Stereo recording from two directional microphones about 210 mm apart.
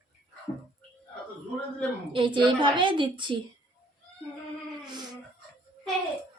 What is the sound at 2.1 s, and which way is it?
Speech, 25° right (ahead or behind).